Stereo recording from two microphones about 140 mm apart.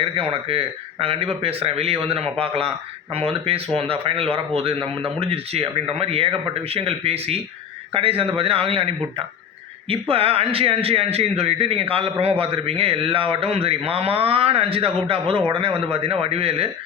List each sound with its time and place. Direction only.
0.0 s speech: 40° right (ahead or behind)